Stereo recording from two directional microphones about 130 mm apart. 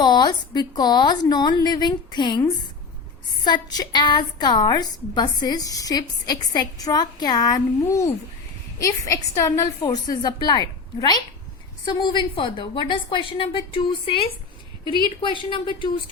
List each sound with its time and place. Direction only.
0.0 s a woman's voice: 35° left (ahead or behind)
3.4 s a woman's voice: 30° left (ahead or behind)